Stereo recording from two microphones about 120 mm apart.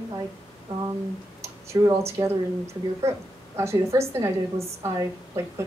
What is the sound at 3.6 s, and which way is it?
A woman's voice, 25° right (ahead or behind).